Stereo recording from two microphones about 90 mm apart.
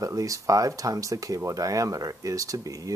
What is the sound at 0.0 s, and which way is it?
Speech, 40° right (ahead or behind).